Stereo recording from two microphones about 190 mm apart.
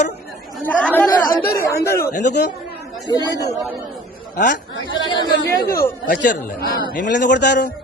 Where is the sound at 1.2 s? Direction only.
50° left (ahead or behind).